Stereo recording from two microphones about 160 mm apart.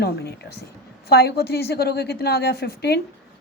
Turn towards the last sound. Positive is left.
turn(degrees=85)